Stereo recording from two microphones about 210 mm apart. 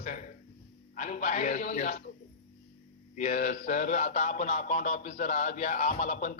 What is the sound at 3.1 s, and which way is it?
Speech, 35° left (ahead or behind).